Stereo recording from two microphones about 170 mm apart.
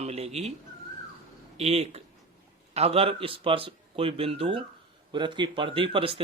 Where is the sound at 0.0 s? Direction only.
40° right (ahead or behind).